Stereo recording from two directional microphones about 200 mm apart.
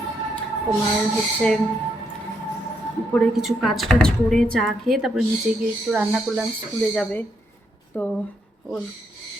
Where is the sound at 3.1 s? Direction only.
Centre (ahead or behind).